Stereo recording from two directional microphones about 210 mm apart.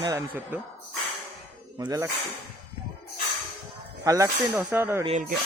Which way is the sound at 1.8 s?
15° right (ahead or behind).